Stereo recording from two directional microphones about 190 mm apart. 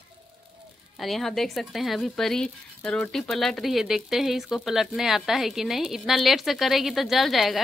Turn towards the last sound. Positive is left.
turn(degrees=0)  # may be behind; listen again after turning